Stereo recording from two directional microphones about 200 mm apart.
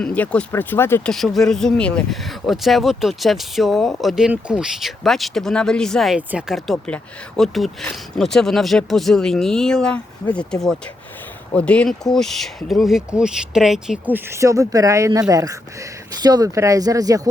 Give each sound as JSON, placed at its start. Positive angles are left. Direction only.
{"t": 0.0, "sound": "speech", "side_deg": 5}
{"t": 1.1, "sound": "speech", "side_deg": 0}